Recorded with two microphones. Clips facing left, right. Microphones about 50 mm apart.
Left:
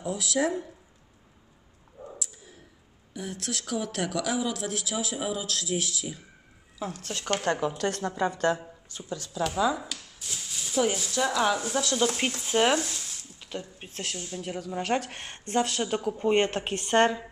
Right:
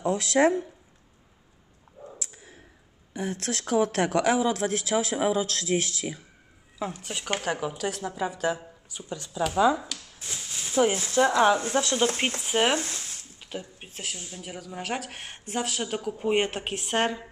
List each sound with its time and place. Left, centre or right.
0.0 s speech: right
2.1 s a sound: right
3.1 s speech: right
7.0 s a woman's voice: centre
9.1 s speech: centre
9.8 s a woman's voice: centre
10.1 s speech: right
12.4 s speech: centre
12.7 s a sound: right
13.4 s a woman's voice: centre